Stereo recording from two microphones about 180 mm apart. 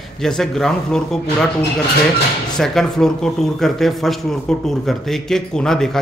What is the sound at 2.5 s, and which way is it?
Speech, centre (ahead or behind).